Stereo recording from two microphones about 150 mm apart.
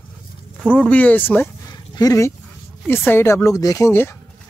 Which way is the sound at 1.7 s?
25° left (ahead or behind).